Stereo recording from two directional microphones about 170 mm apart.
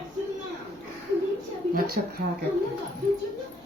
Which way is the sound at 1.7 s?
60° right (ahead or behind).